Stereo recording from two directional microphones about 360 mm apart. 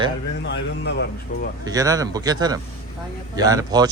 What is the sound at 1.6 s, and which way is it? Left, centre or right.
Speech, centre.